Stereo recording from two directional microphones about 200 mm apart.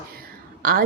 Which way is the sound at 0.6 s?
45° right (ahead or behind).